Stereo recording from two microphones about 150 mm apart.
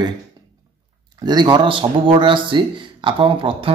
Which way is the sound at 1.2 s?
30° right (ahead or behind).